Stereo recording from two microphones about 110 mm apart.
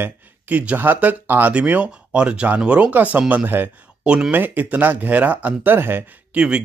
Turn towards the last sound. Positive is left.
turn(degrees=-10)  # may be behind; listen again after turning